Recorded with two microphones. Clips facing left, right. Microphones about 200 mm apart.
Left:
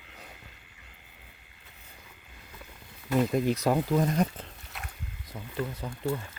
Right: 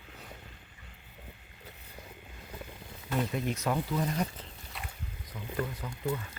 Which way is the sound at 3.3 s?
35° left (ahead or behind).